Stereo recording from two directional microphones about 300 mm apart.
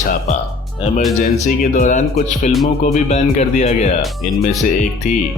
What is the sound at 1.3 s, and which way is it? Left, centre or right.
Speech, left.